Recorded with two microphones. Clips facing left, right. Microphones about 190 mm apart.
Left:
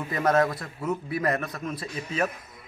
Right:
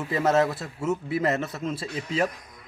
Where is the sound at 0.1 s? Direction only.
25° right (ahead or behind).